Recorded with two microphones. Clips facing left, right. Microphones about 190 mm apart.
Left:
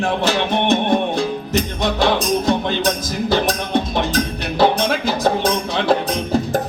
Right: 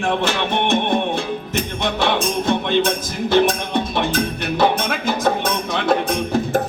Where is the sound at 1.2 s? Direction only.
40° left (ahead or behind).